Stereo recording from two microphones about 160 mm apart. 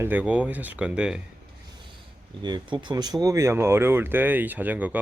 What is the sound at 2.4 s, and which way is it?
Speech, 30° right (ahead or behind).